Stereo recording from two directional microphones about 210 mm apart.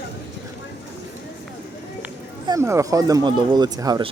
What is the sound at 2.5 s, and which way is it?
Speech, 15° right (ahead or behind).